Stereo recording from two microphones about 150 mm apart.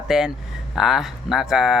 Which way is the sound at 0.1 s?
5° right (ahead or behind).